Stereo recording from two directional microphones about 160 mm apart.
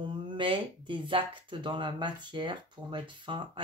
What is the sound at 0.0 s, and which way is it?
Speech, 30° right (ahead or behind).